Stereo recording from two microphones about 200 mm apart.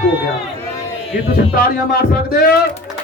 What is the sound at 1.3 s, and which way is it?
A man's voice, 50° left (ahead or behind).